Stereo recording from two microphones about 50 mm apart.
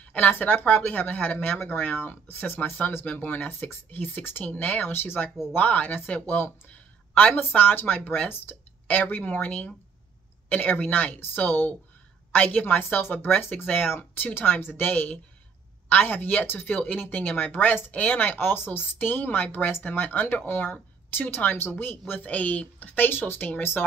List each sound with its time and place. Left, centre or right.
0.0 s speech: left
4.9 s a woman's voice: left
22.2 s speech: left